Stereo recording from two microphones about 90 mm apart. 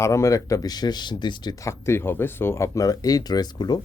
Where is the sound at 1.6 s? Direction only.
30° left (ahead or behind).